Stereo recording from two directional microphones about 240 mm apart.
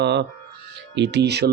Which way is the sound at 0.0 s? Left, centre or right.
Right.